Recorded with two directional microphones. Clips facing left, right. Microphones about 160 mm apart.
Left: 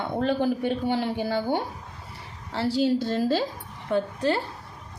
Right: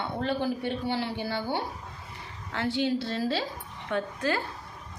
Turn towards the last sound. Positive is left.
turn(degrees=30)  # may be behind; listen again after turning